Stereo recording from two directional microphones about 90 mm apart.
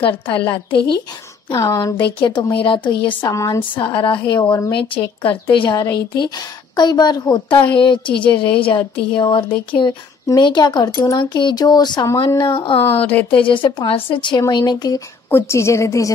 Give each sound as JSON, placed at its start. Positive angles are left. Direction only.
{"t": 0.0, "sound": "speech", "side_deg": 75}
{"t": 1.5, "sound": "a woman's voice", "side_deg": 35}
{"t": 2.0, "sound": "a woman's voice", "side_deg": 65}
{"t": 3.3, "sound": "speech", "side_deg": 45}
{"t": 3.7, "sound": "speech", "side_deg": 70}
{"t": 5.5, "sound": "speech", "side_deg": 60}
{"t": 7.5, "sound": "a woman's voice", "side_deg": 65}
{"t": 12.4, "sound": "speech", "side_deg": 65}
{"t": 14.5, "sound": "speech", "side_deg": 50}
{"t": 15.2, "sound": "a woman's voice", "side_deg": 25}